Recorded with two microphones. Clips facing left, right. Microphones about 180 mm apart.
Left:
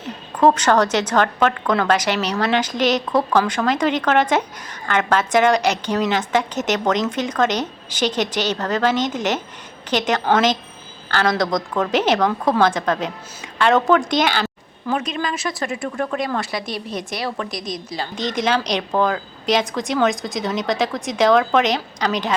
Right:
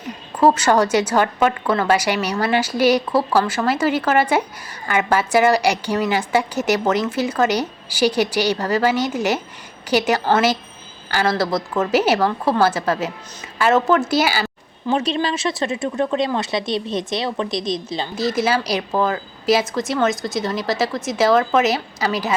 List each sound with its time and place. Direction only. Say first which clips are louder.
0.0 s a woman's voice: even; 10° right (ahead or behind)
14.8 s speech: right 3 dB; 30° right (ahead or behind)
18.1 s speech: right 1 dB; 5° right (ahead or behind)